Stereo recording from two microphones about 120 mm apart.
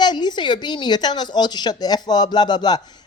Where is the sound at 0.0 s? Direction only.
35° left (ahead or behind).